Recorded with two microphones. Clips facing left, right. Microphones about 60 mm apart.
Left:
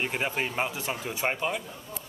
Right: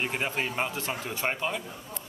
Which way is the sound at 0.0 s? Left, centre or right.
Centre.